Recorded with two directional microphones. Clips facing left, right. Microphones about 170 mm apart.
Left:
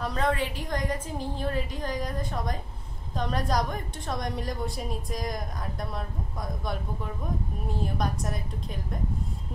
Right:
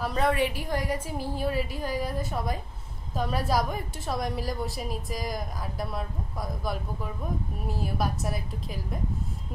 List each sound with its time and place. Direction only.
0.0 s a woman's voice: 5° right (ahead or behind)